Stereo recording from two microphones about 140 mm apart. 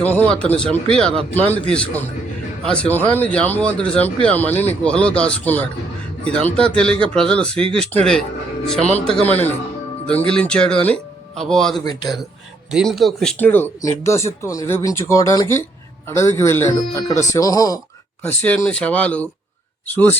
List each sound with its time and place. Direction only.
0.0 s speech: 10° left (ahead or behind)
13.4 s speech: 15° left (ahead or behind)
18.3 s speech: 10° left (ahead or behind)